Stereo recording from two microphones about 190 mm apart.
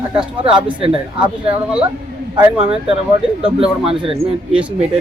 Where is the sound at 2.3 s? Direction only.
5° right (ahead or behind).